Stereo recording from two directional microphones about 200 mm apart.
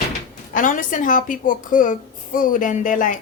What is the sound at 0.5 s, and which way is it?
A woman's voice, 40° left (ahead or behind).